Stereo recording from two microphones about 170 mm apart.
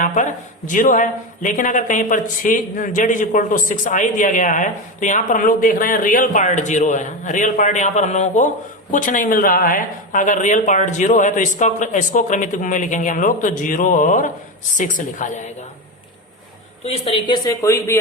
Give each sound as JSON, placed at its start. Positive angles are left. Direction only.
{"t": 0.0, "sound": "speech", "side_deg": 50}
{"t": 16.8, "sound": "speech", "side_deg": 35}